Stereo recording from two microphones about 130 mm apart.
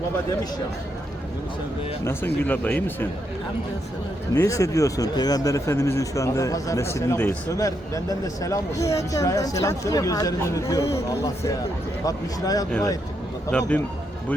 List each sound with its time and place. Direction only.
2.0 s speech: 15° left (ahead or behind)
4.4 s speech: 25° left (ahead or behind)
13.5 s speech: 10° left (ahead or behind)